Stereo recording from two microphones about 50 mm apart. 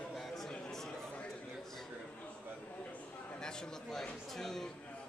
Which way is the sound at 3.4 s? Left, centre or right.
Centre.